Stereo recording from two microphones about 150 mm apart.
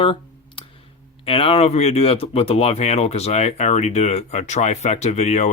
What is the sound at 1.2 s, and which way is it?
Speech, 40° left (ahead or behind).